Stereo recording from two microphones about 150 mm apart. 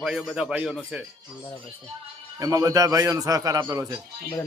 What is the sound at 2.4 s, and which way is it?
A man's voice, 20° right (ahead or behind).